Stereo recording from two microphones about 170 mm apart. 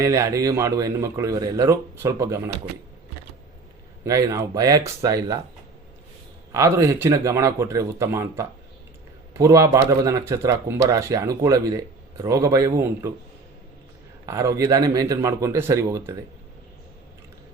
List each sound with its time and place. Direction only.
0.0 s speech: 15° right (ahead or behind)
4.0 s speech: 20° right (ahead or behind)
6.5 s speech: 15° right (ahead or behind)
14.3 s speech: 20° right (ahead or behind)